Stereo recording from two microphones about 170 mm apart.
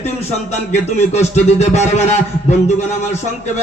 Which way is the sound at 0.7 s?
40° left (ahead or behind).